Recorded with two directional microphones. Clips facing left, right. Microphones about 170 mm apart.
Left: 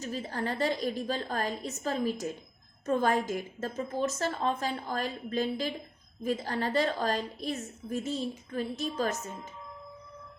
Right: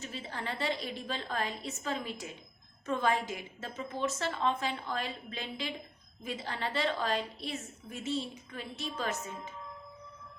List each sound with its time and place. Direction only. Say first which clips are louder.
0.0 s a woman's voice: left 6 dB; 40° left (ahead or behind)